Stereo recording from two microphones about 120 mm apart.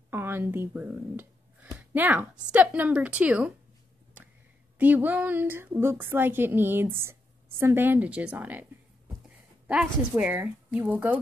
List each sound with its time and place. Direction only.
0.1 s a woman's voice: 20° right (ahead or behind)
4.7 s a woman's voice: 15° right (ahead or behind)
9.7 s a woman's voice: 10° right (ahead or behind)